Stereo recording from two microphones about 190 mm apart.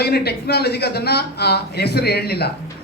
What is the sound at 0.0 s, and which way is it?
A woman's voice, 55° left (ahead or behind).